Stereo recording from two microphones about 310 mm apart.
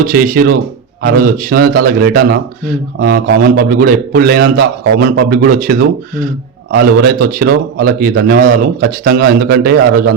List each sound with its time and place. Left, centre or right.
0.0 s a man's voice: right